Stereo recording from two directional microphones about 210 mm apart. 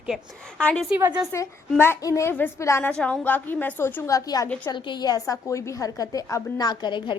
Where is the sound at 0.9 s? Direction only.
10° right (ahead or behind).